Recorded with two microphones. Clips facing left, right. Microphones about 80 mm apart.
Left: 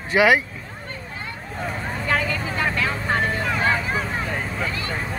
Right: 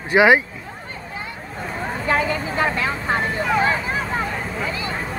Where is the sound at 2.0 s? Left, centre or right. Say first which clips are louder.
Right 3 dB; right.